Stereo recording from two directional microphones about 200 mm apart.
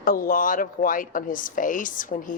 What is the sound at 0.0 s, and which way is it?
A woman's voice, 45° left (ahead or behind).